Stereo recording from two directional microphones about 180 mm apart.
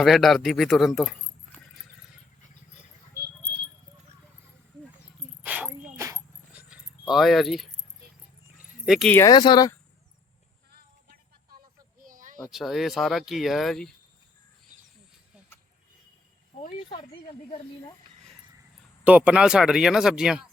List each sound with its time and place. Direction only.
0.0 s speech: centre (ahead or behind)
5.4 s a sound: 10° right (ahead or behind)
6.0 s dog: 15° right (ahead or behind)
7.1 s speech: centre (ahead or behind)
8.5 s dog: 5° right (ahead or behind)
9.0 s speech: 15° left (ahead or behind)
9.3 s speech: 25° left (ahead or behind)
12.0 s a sound: 50° right (ahead or behind)
12.4 s speech: centre (ahead or behind)
16.8 s a sound: 30° left (ahead or behind)
19.0 s speech: 5° right (ahead or behind)